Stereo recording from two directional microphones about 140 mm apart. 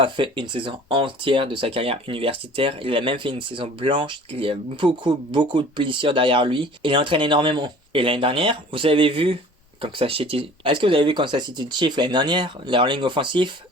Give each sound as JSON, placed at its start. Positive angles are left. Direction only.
{"t": 0.0, "sound": "speech", "side_deg": -35}